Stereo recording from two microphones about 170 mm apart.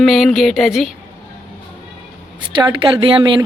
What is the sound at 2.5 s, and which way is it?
Speech, 30° right (ahead or behind).